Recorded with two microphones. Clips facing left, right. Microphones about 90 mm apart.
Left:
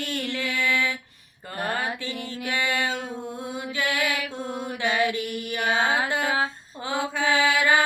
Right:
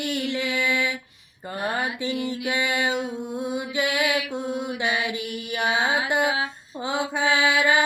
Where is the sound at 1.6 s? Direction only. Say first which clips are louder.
Right 1 dB; 15° right (ahead or behind).